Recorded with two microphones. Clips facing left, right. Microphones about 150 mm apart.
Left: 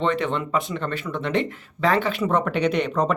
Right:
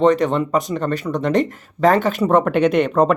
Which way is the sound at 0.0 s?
40° right (ahead or behind).